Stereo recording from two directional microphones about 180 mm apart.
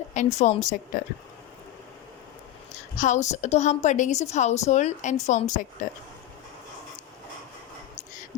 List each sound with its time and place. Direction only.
0.1 s a woman's voice: 40° left (ahead or behind)
3.0 s a woman's voice: 40° left (ahead or behind)